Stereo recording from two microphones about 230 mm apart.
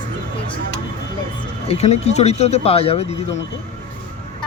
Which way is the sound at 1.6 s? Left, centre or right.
Left.